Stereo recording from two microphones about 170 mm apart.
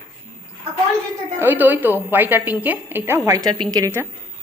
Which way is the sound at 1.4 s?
10° right (ahead or behind).